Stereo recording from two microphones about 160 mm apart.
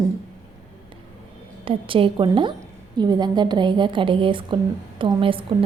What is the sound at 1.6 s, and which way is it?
A woman's voice, 35° right (ahead or behind).